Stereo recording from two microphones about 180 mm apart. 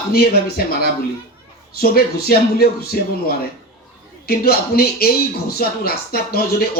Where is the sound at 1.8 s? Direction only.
60° left (ahead or behind).